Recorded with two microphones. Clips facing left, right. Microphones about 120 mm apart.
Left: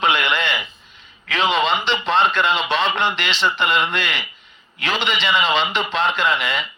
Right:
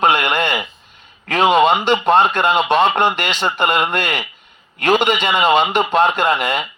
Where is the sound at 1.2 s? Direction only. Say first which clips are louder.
Right 7 dB; 50° right (ahead or behind).